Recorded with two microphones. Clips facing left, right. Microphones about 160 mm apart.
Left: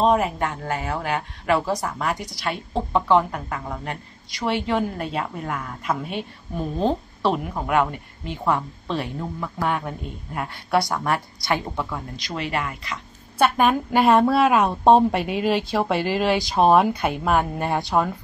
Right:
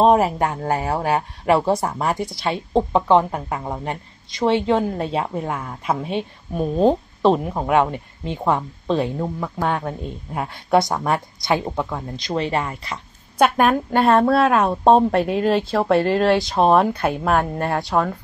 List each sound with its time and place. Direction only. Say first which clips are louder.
0.0 s a woman's voice: right 4 dB; 35° right (ahead or behind); by 9.7 s 20° right (ahead or behind)
9.8 s speech: right 3 dB; centre (ahead or behind)
10.7 s a woman's voice: right 4 dB; 20° right (ahead or behind)
13.6 s a woman's voice: right 2 dB; 5° left (ahead or behind)